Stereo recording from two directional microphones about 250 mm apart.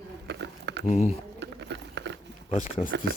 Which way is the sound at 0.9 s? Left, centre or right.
Left.